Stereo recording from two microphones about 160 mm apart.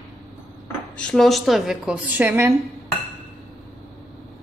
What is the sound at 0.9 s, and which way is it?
A woman's voice, 5° left (ahead or behind).